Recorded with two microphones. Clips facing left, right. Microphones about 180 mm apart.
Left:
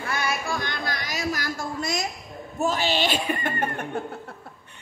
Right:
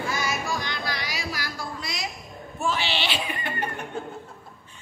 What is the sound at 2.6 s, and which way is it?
Speech, 45° left (ahead or behind).